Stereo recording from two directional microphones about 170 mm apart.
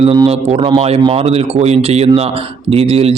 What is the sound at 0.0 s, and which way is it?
A man's voice, 35° right (ahead or behind).